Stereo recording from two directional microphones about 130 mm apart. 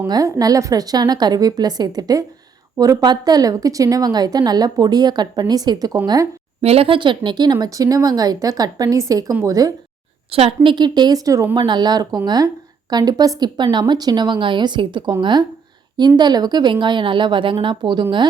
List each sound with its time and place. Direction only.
0.1 s a woman's voice: 25° right (ahead or behind)
6.6 s speech: 50° right (ahead or behind); by 9.7 s 25° right (ahead or behind)
10.3 s a woman's voice: 45° right (ahead or behind)